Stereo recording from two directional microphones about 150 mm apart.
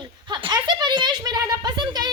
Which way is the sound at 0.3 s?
30° right (ahead or behind).